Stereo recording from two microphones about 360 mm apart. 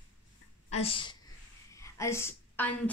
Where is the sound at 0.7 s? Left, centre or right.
Centre.